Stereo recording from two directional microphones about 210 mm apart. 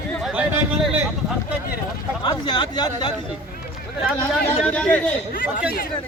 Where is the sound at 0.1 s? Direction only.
Centre (ahead or behind).